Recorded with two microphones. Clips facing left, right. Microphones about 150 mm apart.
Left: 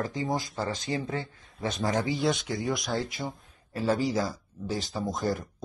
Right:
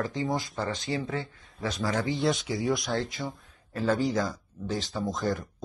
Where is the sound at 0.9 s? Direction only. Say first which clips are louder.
Even; 20° left (ahead or behind).